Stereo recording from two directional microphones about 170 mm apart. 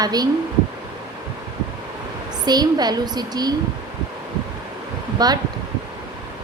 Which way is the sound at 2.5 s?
25° right (ahead or behind).